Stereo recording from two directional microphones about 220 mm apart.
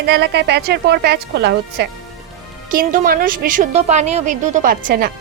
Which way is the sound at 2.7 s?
40° right (ahead or behind).